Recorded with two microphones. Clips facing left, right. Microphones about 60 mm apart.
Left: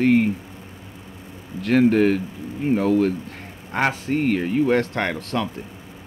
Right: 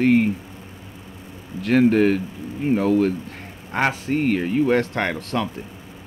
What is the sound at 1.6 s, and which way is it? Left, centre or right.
Speech, centre.